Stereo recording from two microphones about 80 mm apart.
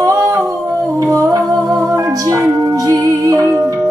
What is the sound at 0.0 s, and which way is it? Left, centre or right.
Humming, right.